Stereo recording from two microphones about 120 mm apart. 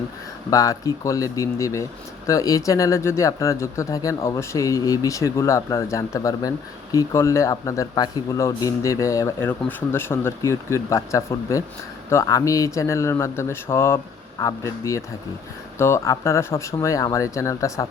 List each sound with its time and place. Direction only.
0.5 s speech: 25° left (ahead or behind)